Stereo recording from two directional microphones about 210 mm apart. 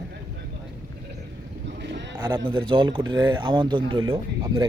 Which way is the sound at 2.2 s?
20° right (ahead or behind).